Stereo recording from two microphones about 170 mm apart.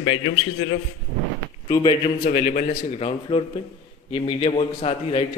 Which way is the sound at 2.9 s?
35° left (ahead or behind).